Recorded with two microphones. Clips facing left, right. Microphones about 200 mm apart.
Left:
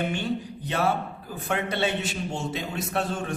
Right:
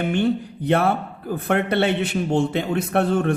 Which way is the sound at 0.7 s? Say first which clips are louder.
Right 6 dB; 55° right (ahead or behind).